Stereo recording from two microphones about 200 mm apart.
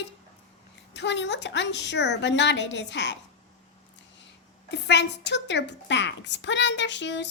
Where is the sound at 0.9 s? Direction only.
60° left (ahead or behind).